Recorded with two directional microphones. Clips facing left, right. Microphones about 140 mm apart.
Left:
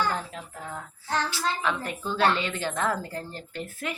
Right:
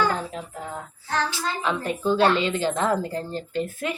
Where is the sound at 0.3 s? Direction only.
20° right (ahead or behind).